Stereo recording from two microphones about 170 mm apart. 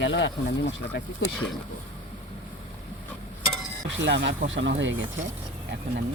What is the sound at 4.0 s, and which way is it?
Speech, 90° right.